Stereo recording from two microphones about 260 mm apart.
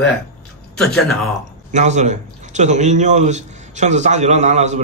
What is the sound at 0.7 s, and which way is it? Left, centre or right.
Speech, centre.